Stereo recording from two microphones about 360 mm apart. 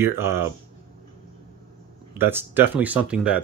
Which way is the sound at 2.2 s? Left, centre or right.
Centre.